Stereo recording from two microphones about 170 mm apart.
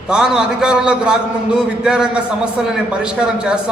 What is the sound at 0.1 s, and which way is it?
A man's voice, 5° right (ahead or behind).